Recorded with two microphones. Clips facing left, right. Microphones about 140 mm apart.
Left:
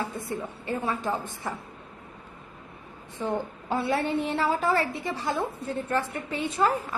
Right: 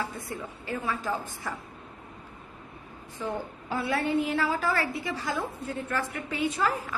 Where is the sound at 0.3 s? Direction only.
25° left (ahead or behind).